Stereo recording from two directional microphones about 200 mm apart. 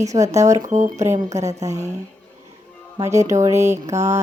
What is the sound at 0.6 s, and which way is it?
Speech, 35° right (ahead or behind).